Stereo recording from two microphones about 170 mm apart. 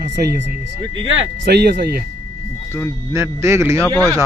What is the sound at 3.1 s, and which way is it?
Speech, 15° right (ahead or behind).